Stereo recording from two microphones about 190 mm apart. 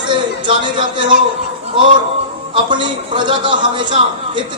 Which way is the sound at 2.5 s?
25° right (ahead or behind).